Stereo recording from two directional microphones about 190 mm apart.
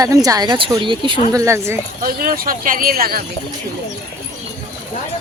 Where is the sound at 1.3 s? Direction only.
15° right (ahead or behind).